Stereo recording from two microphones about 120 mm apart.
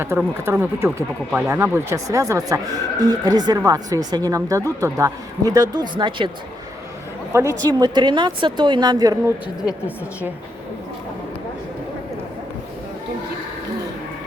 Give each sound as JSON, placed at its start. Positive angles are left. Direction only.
{"t": 0.1, "sound": "a woman's voice", "side_deg": -25}
{"t": 7.3, "sound": "speech", "side_deg": -20}
{"t": 7.7, "sound": "a woman's voice", "side_deg": -40}